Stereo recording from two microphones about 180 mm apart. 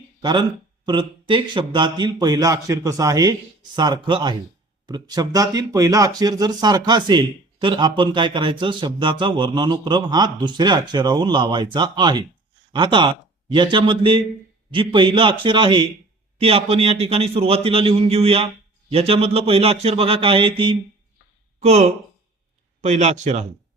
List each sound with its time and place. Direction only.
0.2 s a man's voice: 25° right (ahead or behind); by 23.5 s 40° right (ahead or behind)